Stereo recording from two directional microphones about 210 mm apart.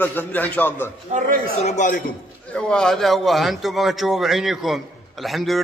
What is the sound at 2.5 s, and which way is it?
A man's voice, 5° left (ahead or behind).